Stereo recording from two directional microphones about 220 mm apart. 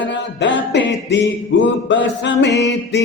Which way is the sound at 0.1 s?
55° left (ahead or behind).